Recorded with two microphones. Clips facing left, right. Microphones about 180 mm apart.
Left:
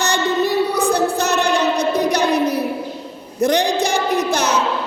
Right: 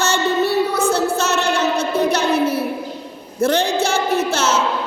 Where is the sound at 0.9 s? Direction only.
15° left (ahead or behind).